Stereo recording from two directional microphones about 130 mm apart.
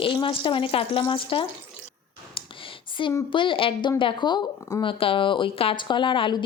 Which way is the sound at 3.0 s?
40° left (ahead or behind).